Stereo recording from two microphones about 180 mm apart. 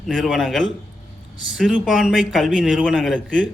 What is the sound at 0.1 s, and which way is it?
A man's voice, centre (ahead or behind).